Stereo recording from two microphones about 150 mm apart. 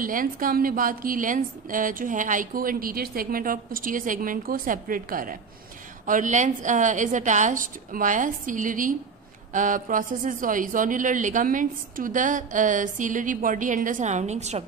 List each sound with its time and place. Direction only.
0.0 s a woman's voice: 65° right (ahead or behind); by 14.6 s 50° right (ahead or behind)